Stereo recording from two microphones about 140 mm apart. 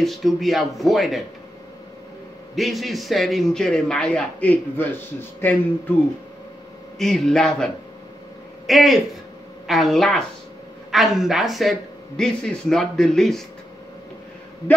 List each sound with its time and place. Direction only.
0.0 s speech: centre (ahead or behind)
2.5 s speech: centre (ahead or behind); by 5.6 s 15° left (ahead or behind)
7.0 s speech: 5° left (ahead or behind)